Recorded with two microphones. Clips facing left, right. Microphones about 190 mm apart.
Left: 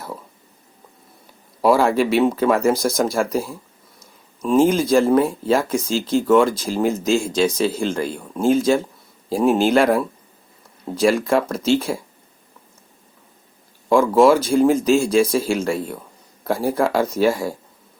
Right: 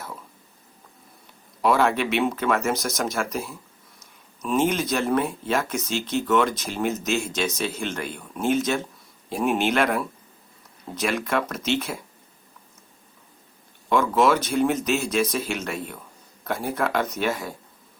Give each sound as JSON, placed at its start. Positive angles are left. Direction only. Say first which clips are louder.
{"t": 1.6, "sound": "speech", "louder": "left 5 dB", "side_deg": 35}
{"t": 13.9, "sound": "speech", "louder": "left 7 dB", "side_deg": 30}